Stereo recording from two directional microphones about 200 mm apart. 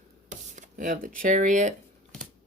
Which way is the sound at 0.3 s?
40° right (ahead or behind).